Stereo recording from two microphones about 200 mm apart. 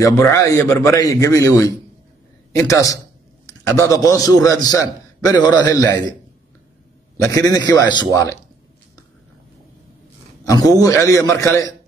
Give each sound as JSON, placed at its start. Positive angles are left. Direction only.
{"t": 0.0, "sound": "a man's voice", "side_deg": 15}
{"t": 7.2, "sound": "a man's voice", "side_deg": 20}
{"t": 10.4, "sound": "a man's voice", "side_deg": 15}